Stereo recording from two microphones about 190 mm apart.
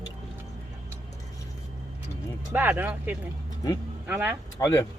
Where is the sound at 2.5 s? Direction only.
10° right (ahead or behind).